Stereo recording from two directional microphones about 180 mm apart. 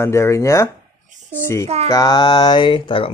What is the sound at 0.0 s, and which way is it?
A man's voice, 15° left (ahead or behind).